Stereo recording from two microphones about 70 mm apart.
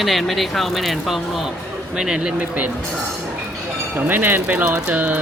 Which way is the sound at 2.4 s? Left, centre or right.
Right.